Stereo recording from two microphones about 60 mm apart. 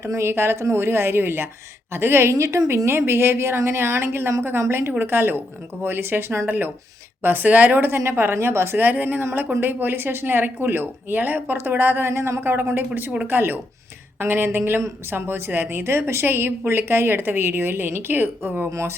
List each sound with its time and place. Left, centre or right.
0.0 s a woman's voice: right
2.3 s a woman's voice: right
7.9 s speech: right
12.4 s speech: right
18.7 s a woman's voice: right